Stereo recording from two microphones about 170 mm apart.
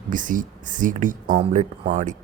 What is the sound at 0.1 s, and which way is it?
Speech, 50° right (ahead or behind).